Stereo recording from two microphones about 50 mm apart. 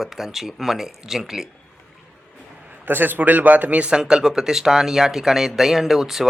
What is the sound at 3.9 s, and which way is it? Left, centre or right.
Speech, centre.